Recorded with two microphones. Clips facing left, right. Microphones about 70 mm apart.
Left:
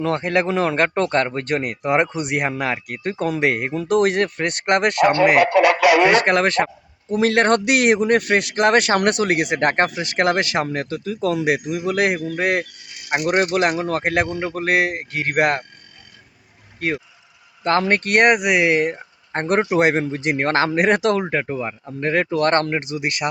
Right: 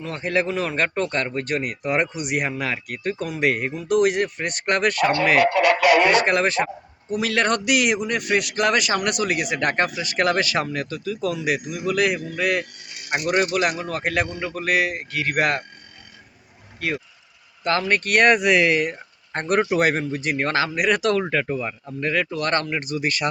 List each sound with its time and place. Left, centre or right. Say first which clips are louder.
0.2 s speech: left 4 dB; left
4.6 s speech: left 4 dB; left
6.1 s speech: left 3 dB; left
7.1 s speech: left 5 dB; left
17.6 s speech: left 3 dB; left
18.3 s speech: left 1 dB; centre
22.1 s speech: left 6 dB; left
22.7 s speech: left 1 dB; left